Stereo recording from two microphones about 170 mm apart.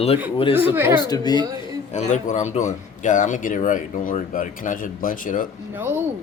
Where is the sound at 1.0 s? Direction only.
25° left (ahead or behind).